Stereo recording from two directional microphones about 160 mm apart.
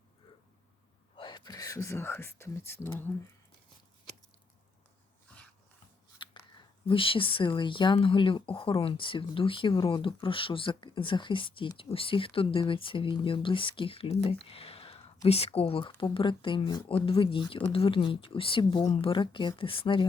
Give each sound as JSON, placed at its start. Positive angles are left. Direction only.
{"t": 1.1, "sound": "speech", "side_deg": 30}
{"t": 5.3, "sound": "dog", "side_deg": 10}
{"t": 6.2, "sound": "a sound", "side_deg": 30}
{"t": 6.8, "sound": "speech", "side_deg": 35}